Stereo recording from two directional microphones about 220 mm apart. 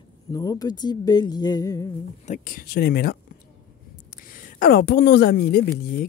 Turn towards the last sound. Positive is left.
turn(degrees=45)  # may be behind; listen again after turning